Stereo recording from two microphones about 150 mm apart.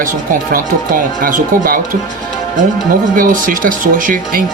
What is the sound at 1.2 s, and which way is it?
Speech, 75° right (ahead or behind).